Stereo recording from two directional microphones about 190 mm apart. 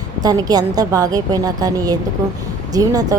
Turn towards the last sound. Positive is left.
turn(degrees=-20)  # may be behind; listen again after turning